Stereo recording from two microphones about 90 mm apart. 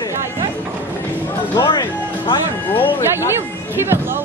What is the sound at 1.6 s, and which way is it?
Music, 60° left (ahead or behind).